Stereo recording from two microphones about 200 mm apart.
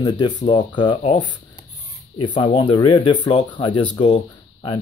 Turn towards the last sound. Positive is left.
turn(degrees=25)  # may be behind; listen again after turning